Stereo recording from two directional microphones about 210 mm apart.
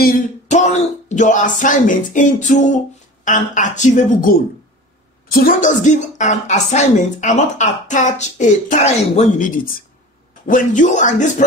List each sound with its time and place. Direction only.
0.0 s speech: 35° left (ahead or behind)